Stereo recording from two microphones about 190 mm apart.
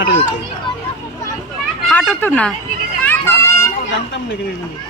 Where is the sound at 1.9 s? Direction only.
10° left (ahead or behind).